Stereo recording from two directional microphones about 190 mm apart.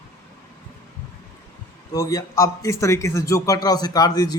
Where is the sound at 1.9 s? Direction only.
20° left (ahead or behind).